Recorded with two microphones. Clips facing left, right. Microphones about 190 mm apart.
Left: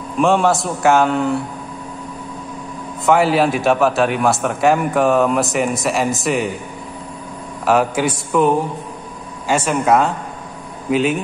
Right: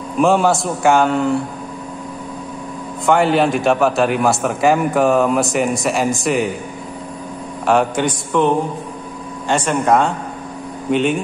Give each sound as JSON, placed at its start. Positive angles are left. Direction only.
{"t": 0.2, "sound": "a man's voice", "side_deg": 0}
{"t": 3.1, "sound": "a man's voice", "side_deg": 0}
{"t": 7.6, "sound": "a man's voice", "side_deg": 5}